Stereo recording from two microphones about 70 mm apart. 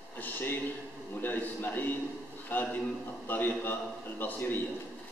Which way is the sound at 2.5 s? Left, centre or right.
Left.